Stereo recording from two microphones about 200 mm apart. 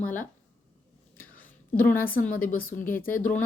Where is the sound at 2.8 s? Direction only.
10° left (ahead or behind).